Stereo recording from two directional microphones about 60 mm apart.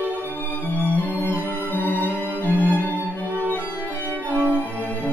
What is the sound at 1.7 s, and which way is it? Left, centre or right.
Music, left.